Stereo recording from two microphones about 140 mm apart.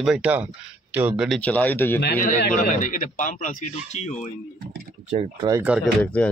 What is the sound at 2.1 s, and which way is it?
A man's voice, 70° left (ahead or behind).